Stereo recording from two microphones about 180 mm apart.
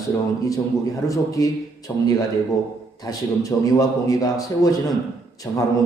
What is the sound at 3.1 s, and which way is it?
A man's voice, 20° left (ahead or behind).